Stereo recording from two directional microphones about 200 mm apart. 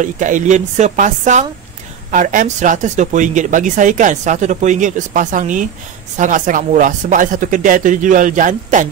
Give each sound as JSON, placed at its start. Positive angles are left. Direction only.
{"t": 0.0, "sound": "speech", "side_deg": -40}